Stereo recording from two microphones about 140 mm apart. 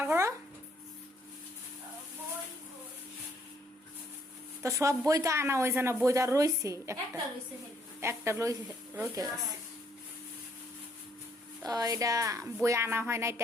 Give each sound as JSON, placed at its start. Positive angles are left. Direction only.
{"t": 0.0, "sound": "a sound", "side_deg": -20}
{"t": 4.6, "sound": "speech", "side_deg": -20}
{"t": 11.6, "sound": "speech", "side_deg": -25}